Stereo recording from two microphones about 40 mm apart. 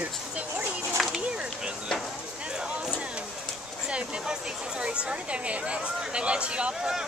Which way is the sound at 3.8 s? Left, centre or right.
Right.